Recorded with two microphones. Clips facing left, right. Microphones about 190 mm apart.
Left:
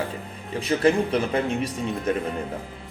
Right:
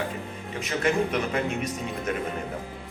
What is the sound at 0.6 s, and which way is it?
Speech, 30° left (ahead or behind).